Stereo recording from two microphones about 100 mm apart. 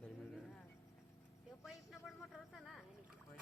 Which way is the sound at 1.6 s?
Centre (ahead or behind).